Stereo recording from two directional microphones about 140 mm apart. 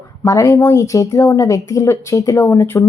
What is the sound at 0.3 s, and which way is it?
Speech, 20° left (ahead or behind).